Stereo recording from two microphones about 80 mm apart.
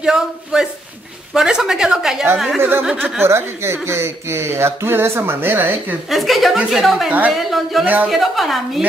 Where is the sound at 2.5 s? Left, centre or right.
Right.